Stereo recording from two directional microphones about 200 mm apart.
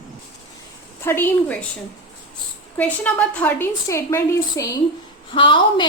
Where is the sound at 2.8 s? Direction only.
5° left (ahead or behind).